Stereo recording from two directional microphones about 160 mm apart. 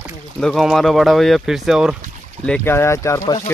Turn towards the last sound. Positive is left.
turn(degrees=15)  # may be behind; listen again after turning